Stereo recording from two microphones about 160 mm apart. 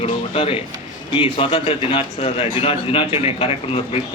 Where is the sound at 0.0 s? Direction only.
35° left (ahead or behind).